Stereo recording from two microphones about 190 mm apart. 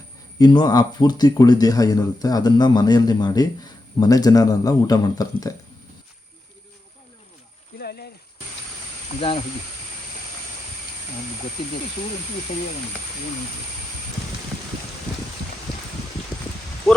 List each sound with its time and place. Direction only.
0.3 s speech: 20° left (ahead or behind)
7.8 s a sound: 55° left (ahead or behind)
16.9 s speech: centre (ahead or behind)